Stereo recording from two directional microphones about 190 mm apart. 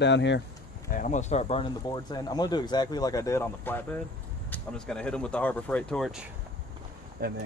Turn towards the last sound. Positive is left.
turn(degrees=-55)  # may be behind; listen again after turning